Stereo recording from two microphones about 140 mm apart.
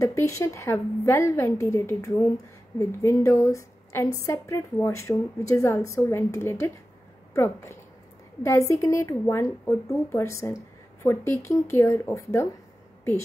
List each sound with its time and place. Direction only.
0.0 s a woman's voice: 20° left (ahead or behind)